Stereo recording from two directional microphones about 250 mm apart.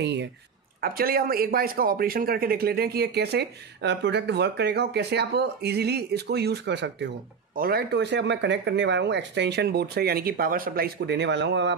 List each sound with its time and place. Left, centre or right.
0.0 s speech: right